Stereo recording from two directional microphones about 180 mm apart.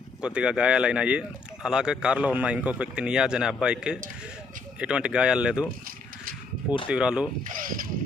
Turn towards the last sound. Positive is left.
turn(degrees=-50)  # may be behind; listen again after turning